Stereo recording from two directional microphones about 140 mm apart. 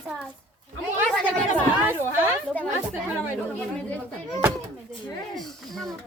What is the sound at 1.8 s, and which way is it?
Speech, 15° right (ahead or behind).